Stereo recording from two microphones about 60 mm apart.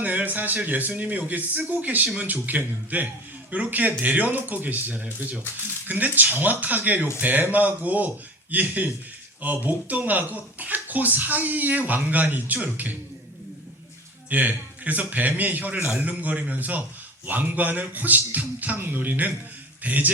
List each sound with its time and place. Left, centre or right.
0.0 s speech: right
14.3 s a man's voice: right